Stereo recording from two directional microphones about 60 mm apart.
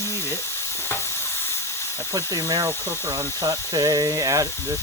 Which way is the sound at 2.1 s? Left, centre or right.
Right.